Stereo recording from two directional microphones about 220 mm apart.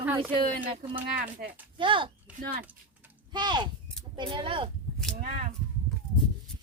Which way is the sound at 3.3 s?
20° right (ahead or behind).